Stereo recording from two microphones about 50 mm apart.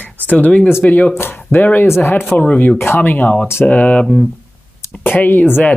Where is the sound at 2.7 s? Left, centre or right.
Left.